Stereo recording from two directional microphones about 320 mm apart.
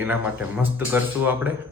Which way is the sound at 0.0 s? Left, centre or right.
Centre.